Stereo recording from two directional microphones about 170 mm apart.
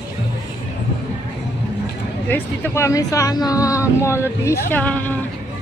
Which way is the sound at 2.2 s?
15° left (ahead or behind).